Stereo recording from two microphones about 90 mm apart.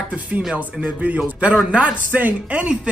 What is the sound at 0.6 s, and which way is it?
A man's voice, 15° right (ahead or behind).